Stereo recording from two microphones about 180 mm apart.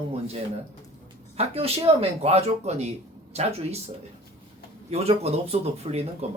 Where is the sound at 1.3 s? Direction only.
35° right (ahead or behind).